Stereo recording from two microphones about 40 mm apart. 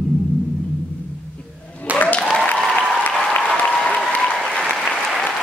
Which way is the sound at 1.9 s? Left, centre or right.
Left.